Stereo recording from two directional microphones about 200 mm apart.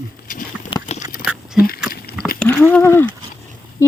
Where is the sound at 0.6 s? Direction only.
25° left (ahead or behind).